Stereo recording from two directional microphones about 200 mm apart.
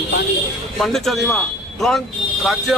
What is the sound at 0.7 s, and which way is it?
A man's voice, centre (ahead or behind).